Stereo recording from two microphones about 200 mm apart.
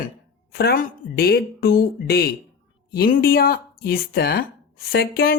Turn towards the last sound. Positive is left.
turn(degrees=50)  # may be behind; listen again after turning